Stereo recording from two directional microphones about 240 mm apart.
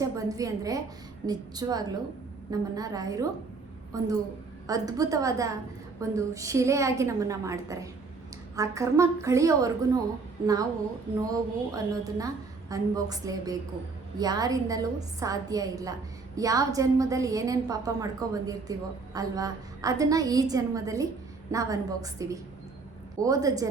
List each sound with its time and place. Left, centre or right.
0.0 s a woman's voice: centre